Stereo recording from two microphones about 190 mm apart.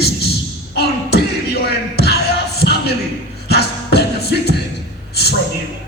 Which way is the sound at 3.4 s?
60° left (ahead or behind).